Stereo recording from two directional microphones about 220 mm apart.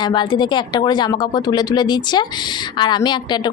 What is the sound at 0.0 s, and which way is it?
Speech, 20° left (ahead or behind).